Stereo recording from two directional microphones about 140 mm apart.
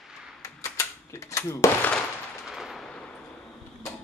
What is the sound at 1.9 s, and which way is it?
Machine gun, centre (ahead or behind).